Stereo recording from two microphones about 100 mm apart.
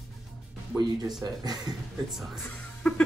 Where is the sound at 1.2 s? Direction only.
40° right (ahead or behind).